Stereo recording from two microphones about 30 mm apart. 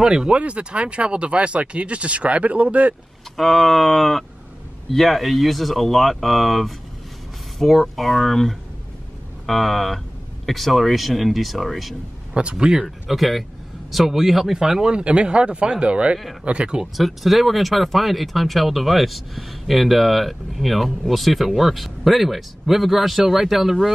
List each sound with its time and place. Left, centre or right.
0.0 s speech: right
0.3 s speech: right
3.3 s speech: centre
12.5 s speech: right
13.1 s speech: centre
14.5 s speech: centre
15.0 s speech: right
16.8 s speech: centre